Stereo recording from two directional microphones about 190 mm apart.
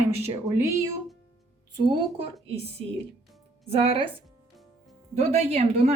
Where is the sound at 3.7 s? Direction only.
30° right (ahead or behind).